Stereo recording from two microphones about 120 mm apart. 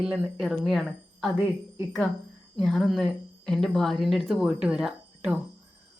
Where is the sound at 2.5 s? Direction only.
Centre (ahead or behind).